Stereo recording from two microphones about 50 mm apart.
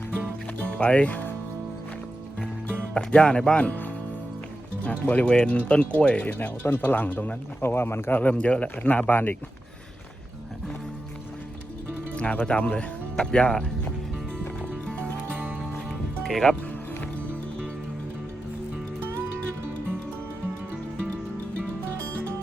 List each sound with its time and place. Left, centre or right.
0.6 s speech: left
2.9 s speech: centre
3.7 s music: left
4.8 s speech: left
6.4 s speech: left
7.6 s speech: left
8.2 s speech: left
12.1 s speech: left
14.8 s music: left
15.3 s music: right
16.2 s speech: centre